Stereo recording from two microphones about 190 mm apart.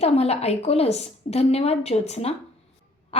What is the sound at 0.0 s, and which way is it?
A woman's voice, 35° left (ahead or behind).